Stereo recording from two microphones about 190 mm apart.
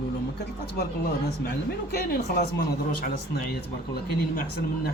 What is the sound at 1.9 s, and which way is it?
Speech, 55° left (ahead or behind).